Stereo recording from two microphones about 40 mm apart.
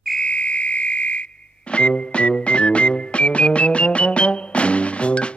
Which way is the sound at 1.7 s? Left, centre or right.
Left.